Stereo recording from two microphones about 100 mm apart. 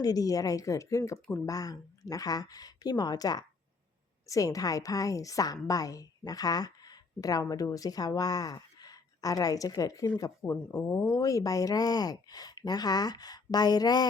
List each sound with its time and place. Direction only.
0.0 s a woman's voice: 40° left (ahead or behind)